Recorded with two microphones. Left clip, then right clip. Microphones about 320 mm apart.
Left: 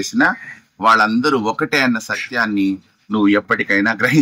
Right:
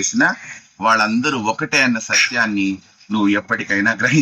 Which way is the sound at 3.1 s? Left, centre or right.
Centre.